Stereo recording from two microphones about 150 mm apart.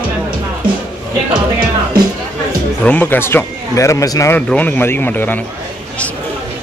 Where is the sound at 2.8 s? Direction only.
10° left (ahead or behind).